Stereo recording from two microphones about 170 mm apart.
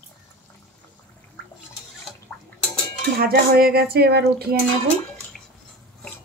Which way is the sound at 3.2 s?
65° right (ahead or behind).